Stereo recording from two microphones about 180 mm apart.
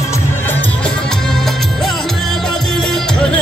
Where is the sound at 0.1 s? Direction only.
15° left (ahead or behind).